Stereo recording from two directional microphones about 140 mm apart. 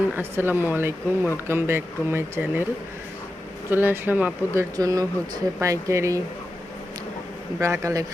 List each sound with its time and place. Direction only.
0.1 s speech: 15° right (ahead or behind)
3.7 s speech: 15° right (ahead or behind)
4.8 s speech: 25° right (ahead or behind)
7.6 s speech: 20° right (ahead or behind)